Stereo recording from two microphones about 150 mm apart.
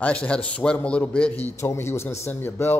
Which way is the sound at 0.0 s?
10° left (ahead or behind).